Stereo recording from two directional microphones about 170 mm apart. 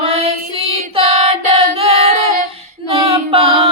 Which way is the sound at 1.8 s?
35° right (ahead or behind).